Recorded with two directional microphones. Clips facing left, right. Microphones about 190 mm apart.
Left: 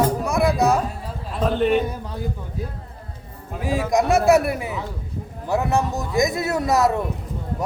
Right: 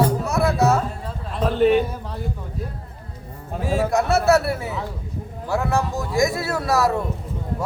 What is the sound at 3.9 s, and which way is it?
A man's voice, 15° left (ahead or behind).